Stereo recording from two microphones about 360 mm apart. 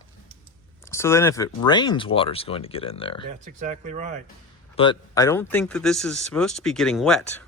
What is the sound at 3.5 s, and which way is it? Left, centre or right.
Speech, centre.